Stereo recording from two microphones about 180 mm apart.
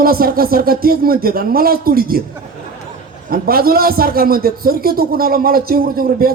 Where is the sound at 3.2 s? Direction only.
55° right (ahead or behind).